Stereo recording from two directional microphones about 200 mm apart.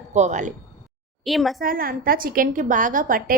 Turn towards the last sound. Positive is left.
turn(degrees=-45)  # may be behind; listen again after turning